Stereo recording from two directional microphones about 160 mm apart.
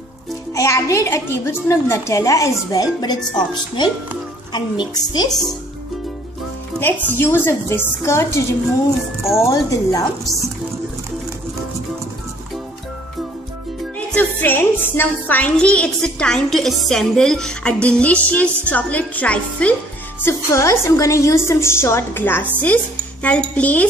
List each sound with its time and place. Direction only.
0.6 s a child's voice: 20° left (ahead or behind)
6.8 s a woman's voice: 15° left (ahead or behind)
9.5 s a child's voice: 20° left (ahead or behind)
13.9 s a woman's voice: 10° left (ahead or behind)